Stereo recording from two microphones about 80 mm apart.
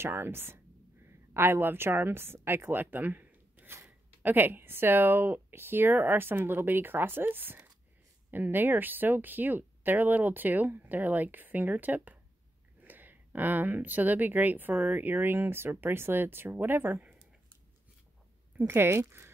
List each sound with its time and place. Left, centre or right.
0.0 s speech: right
18.6 s speech: right